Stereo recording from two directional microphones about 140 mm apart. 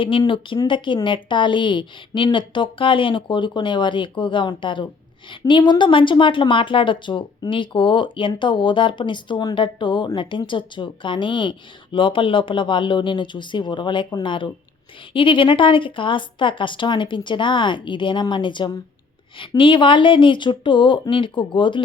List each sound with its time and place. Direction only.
0.0 s a woman's voice: 35° left (ahead or behind)